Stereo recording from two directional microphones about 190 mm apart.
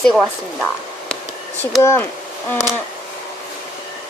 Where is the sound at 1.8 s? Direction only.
15° left (ahead or behind).